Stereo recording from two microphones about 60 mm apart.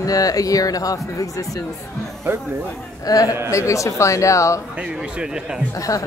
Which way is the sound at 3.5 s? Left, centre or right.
Left.